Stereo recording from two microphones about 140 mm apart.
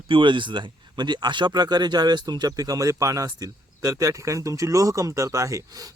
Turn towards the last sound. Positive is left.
turn(degrees=-25)  # may be behind; listen again after turning